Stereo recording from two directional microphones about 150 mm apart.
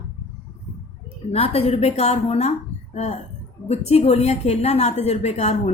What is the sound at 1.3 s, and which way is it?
A woman's voice, 45° left (ahead or behind).